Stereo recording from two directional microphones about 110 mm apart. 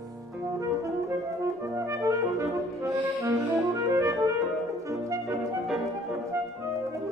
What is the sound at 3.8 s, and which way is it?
Music, 30° right (ahead or behind).